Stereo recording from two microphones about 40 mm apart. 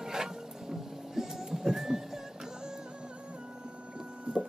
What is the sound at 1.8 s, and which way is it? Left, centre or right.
Music, centre.